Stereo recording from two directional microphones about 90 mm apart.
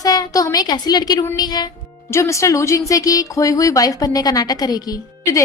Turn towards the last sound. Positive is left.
turn(degrees=45)  # may be behind; listen again after turning